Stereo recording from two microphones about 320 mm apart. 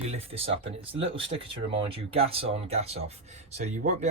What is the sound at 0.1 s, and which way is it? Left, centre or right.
Speech, centre.